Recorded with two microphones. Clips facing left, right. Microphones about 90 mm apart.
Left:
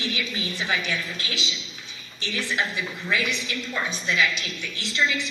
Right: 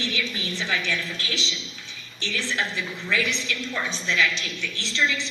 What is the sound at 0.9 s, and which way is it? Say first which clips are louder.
A woman's voice: right 1 dB; 15° left (ahead or behind).